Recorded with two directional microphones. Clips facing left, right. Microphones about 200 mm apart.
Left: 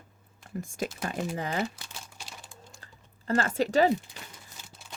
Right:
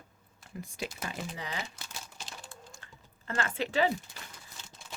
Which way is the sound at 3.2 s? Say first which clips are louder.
Left 7 dB; 35° left (ahead or behind).